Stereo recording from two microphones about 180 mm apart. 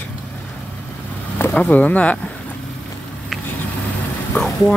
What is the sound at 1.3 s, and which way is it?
Speech, 10° left (ahead or behind).